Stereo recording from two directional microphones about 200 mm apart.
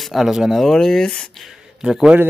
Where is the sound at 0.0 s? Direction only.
Centre (ahead or behind).